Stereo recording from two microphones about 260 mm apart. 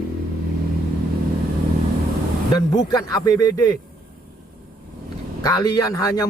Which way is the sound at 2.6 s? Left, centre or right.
Centre.